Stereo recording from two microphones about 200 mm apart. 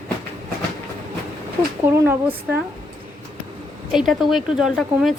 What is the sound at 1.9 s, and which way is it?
Speech, 10° right (ahead or behind).